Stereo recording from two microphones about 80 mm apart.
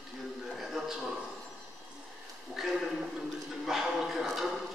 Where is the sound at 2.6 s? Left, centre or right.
Centre.